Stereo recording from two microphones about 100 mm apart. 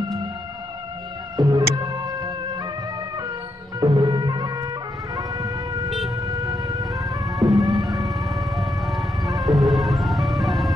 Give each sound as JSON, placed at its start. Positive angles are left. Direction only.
{"t": 1.3, "sound": "music", "side_deg": -35}
{"t": 3.8, "sound": "music", "side_deg": -40}
{"t": 5.1, "sound": "emergency vehicle", "side_deg": -35}
{"t": 5.9, "sound": "siren", "side_deg": 0}
{"t": 6.2, "sound": "siren", "side_deg": -35}
{"t": 6.7, "sound": "vehicle", "side_deg": -35}
{"t": 7.2, "sound": "music", "side_deg": 0}
{"t": 7.6, "sound": "siren", "side_deg": 0}